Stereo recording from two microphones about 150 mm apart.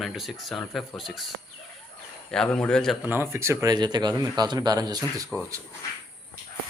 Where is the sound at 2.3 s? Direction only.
5° left (ahead or behind).